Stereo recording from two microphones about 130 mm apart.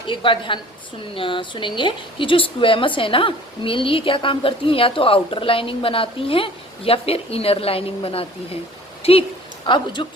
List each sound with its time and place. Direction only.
0.1 s a woman's voice: 40° left (ahead or behind)
9.6 s a woman's voice: 35° left (ahead or behind)